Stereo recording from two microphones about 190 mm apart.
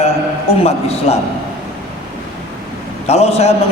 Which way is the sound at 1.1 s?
35° left (ahead or behind).